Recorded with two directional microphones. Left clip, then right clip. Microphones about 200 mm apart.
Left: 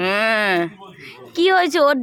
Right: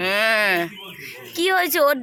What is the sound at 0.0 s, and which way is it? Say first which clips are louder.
Speech: left 1 dB; 30° left (ahead or behind).